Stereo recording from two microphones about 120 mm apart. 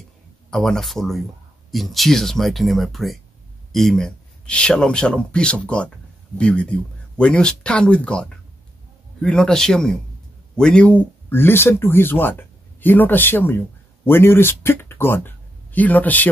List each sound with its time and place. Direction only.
0.5 s speech: 5° left (ahead or behind)